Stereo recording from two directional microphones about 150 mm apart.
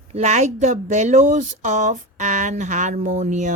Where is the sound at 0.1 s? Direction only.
50° right (ahead or behind).